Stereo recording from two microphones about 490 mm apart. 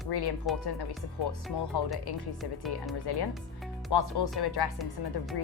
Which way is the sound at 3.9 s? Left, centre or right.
Left.